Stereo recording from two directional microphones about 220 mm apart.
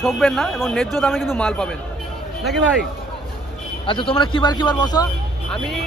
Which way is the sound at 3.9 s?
20° left (ahead or behind).